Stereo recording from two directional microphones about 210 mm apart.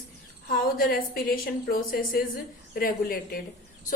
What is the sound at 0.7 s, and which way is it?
A woman's voice, 45° left (ahead or behind).